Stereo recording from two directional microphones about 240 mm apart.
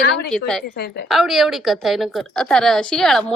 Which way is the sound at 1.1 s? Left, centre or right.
Centre.